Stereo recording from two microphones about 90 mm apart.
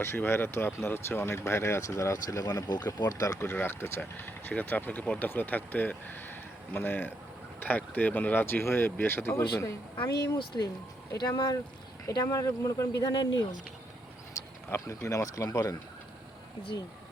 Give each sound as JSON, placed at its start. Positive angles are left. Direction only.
{"t": 0.0, "sound": "speech", "side_deg": 25}
{"t": 3.4, "sound": "speech", "side_deg": 25}
{"t": 10.3, "sound": "speech", "side_deg": 60}
{"t": 12.0, "sound": "speech", "side_deg": 45}
{"t": 14.7, "sound": "speech", "side_deg": 35}